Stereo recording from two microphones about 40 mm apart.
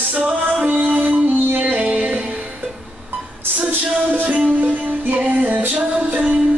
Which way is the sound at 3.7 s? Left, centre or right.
Right.